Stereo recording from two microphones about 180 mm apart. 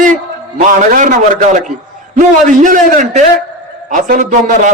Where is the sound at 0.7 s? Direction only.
45° right (ahead or behind).